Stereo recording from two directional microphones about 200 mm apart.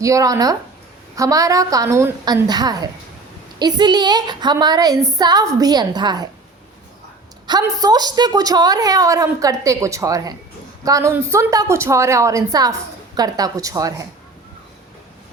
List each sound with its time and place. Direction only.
0.0 s a woman's voice: 15° right (ahead or behind)
7.4 s a woman's voice: 20° right (ahead or behind)